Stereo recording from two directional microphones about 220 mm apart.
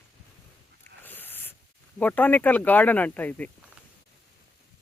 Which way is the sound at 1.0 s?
10° left (ahead or behind).